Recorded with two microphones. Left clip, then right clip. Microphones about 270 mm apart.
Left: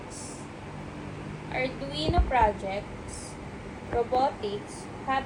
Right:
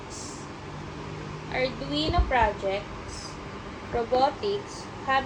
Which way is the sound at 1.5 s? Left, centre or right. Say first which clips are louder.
Right 3 dB; right.